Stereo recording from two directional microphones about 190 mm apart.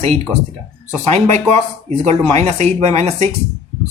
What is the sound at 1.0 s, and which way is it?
Speech, 35° right (ahead or behind).